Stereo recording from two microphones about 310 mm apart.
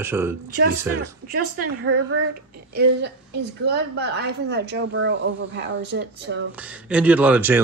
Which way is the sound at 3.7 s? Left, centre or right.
Right.